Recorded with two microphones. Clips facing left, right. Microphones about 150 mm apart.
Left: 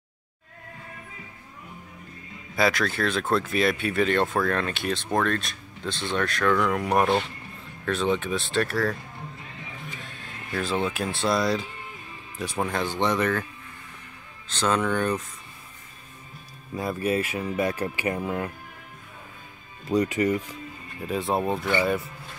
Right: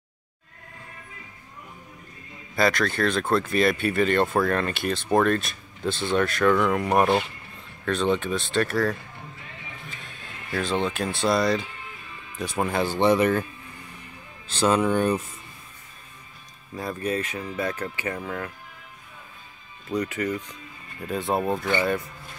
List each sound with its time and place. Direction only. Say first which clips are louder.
2.5 s speech: right 1 dB; 5° left (ahead or behind)
10.0 s speech: left 1 dB; centre (ahead or behind)
14.5 s speech: right 3 dB; 10° right (ahead or behind)
16.7 s speech: left 2 dB; 10° left (ahead or behind)
20.1 s speech: left 4 dB; 15° left (ahead or behind)
21.1 s speech: even; centre (ahead or behind)